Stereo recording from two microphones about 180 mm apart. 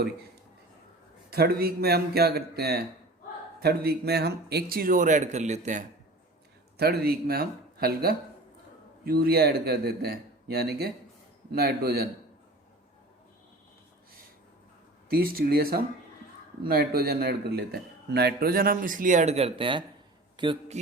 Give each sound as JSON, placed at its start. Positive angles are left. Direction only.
{"t": 1.3, "sound": "a man's voice", "side_deg": -60}
{"t": 6.7, "sound": "a man's voice", "side_deg": -60}
{"t": 15.1, "sound": "a man's voice", "side_deg": -55}
{"t": 20.3, "sound": "a sound", "side_deg": -25}